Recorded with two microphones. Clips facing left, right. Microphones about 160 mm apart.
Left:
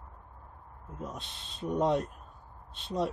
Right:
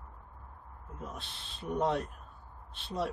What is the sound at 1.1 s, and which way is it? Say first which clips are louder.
Speech: left 2 dB; 20° left (ahead or behind).